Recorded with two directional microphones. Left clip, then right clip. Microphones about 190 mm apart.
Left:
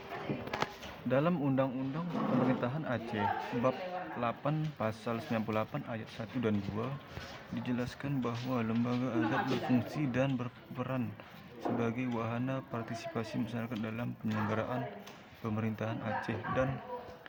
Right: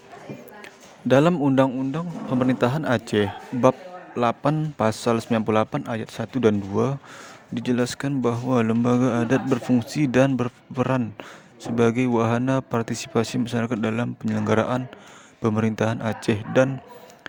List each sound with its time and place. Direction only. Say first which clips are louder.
1.0 s a man's voice: right 13 dB; 65° right (ahead or behind)
1.4 s a man's voice: right 13 dB; 50° right (ahead or behind)